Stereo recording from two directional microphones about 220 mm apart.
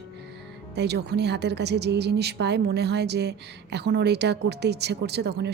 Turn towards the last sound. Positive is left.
turn(degrees=-50)  # may be behind; listen again after turning